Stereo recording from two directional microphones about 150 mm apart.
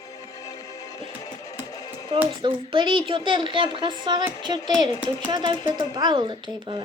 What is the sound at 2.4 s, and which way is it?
A woman's voice, 35° right (ahead or behind).